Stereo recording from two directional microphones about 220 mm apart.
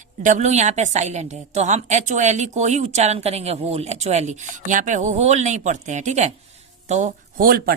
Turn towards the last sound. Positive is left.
turn(degrees=-40)  # may be behind; listen again after turning